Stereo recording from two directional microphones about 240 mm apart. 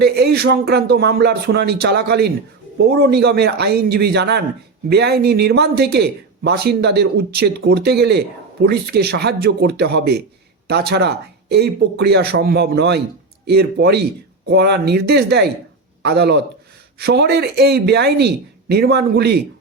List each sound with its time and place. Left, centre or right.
0.0 s speech: right